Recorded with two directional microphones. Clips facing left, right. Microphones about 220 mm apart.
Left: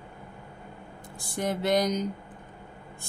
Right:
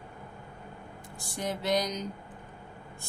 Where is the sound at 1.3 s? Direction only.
55° left (ahead or behind).